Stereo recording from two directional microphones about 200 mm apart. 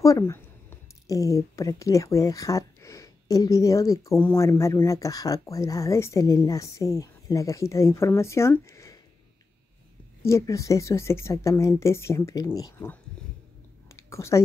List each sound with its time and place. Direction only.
0.0 s speech: 15° left (ahead or behind)
10.2 s speech: 15° left (ahead or behind)
13.8 s a sound: 15° left (ahead or behind)